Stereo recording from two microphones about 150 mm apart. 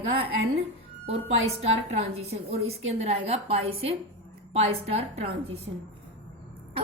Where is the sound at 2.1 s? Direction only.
45° right (ahead or behind).